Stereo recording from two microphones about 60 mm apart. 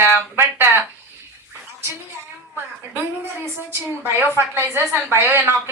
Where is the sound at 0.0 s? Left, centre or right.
Right.